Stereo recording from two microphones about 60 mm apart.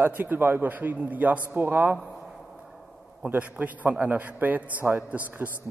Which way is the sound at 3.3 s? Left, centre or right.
Right.